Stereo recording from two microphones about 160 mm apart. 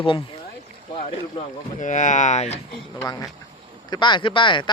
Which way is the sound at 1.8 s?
50° left (ahead or behind).